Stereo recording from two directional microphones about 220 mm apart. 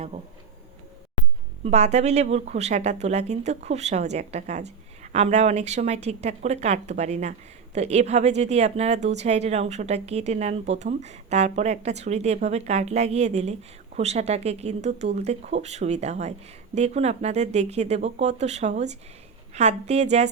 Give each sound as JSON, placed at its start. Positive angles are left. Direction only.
{"t": 1.6, "sound": "speech", "side_deg": -30}